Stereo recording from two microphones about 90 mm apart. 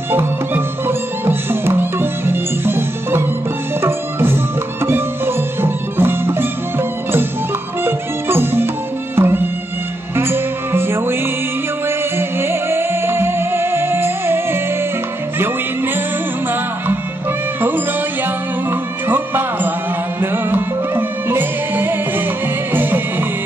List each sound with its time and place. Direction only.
0.1 s music: 25° right (ahead or behind)
12.2 s music: 25° right (ahead or behind)
17.6 s music: 20° right (ahead or behind)